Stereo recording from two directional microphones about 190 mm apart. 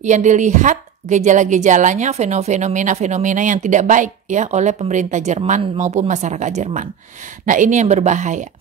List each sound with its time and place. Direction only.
0.0 s a woman's voice: 40° right (ahead or behind)